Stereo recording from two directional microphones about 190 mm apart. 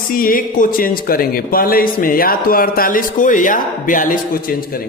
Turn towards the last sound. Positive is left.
turn(degrees=45)  # may be behind; listen again after turning